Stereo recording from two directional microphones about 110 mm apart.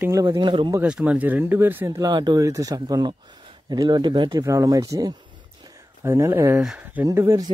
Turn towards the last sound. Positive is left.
turn(degrees=-25)  # may be behind; listen again after turning